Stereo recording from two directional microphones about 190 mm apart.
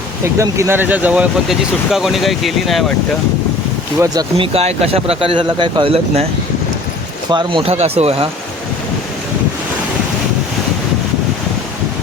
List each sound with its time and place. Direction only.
0.3 s speech: 15° right (ahead or behind)
4.0 s speech: 20° right (ahead or behind)
4.5 s speech: 30° right (ahead or behind)
7.3 s speech: 25° right (ahead or behind)